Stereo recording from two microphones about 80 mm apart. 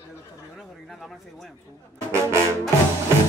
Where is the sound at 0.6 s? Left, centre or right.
Centre.